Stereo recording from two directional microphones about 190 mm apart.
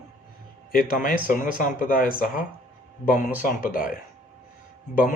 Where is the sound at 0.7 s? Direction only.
50° left (ahead or behind).